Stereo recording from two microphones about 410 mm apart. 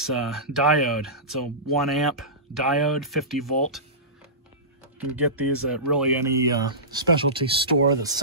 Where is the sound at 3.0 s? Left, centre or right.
Centre.